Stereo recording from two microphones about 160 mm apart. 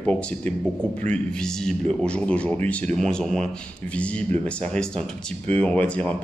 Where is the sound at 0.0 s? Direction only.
10° left (ahead or behind).